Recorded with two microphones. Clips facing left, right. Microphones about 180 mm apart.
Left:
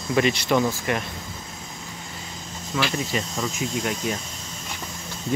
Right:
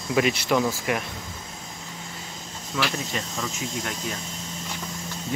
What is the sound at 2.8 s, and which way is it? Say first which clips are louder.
Speech: left 3 dB; centre (ahead or behind).